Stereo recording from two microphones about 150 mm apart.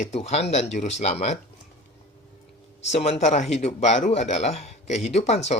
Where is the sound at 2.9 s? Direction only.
45° left (ahead or behind).